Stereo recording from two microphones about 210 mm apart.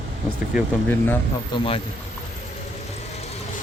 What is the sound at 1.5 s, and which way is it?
Speech, 25° left (ahead or behind).